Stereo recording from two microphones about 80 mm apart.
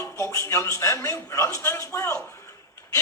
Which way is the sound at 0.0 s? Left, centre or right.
Left.